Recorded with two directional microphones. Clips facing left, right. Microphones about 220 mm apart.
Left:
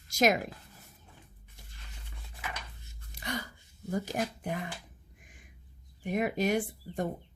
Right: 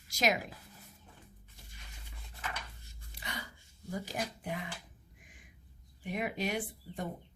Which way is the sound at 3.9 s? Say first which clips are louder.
Left 6 dB; 45° left (ahead or behind).